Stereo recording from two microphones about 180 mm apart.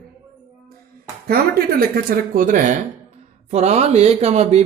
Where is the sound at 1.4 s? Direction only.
55° right (ahead or behind).